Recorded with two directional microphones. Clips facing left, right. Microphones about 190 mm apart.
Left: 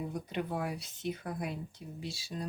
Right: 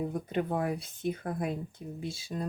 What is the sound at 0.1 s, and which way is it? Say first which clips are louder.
Speech: right 5 dB; 50° right (ahead or behind).